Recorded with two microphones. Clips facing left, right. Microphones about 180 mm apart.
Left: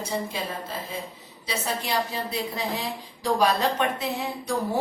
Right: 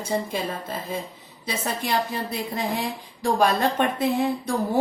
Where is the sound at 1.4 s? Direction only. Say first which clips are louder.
Right 2 dB; 55° right (ahead or behind).